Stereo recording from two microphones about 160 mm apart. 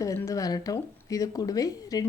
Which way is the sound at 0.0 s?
20° left (ahead or behind).